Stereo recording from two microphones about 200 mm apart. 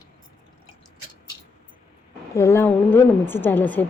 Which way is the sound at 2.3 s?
15° left (ahead or behind).